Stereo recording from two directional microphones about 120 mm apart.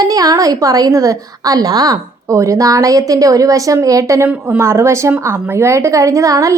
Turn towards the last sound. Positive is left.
turn(degrees=-25)  # may be behind; listen again after turning